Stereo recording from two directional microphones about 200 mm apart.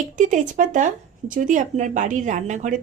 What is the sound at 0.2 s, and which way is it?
A woman's voice, 40° right (ahead or behind).